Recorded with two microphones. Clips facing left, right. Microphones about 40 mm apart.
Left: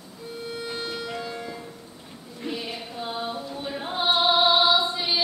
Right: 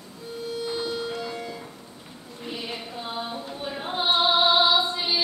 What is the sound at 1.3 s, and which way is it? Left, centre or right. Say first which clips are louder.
Music: right 1 dB; centre.